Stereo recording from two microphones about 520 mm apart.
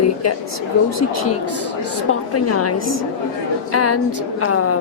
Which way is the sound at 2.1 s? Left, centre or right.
Left.